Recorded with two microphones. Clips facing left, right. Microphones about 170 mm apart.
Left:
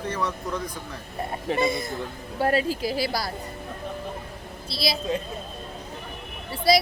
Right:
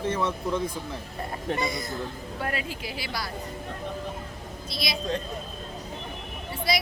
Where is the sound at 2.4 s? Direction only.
35° left (ahead or behind).